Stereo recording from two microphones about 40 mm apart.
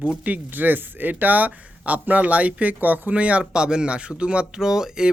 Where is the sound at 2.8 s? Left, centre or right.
Right.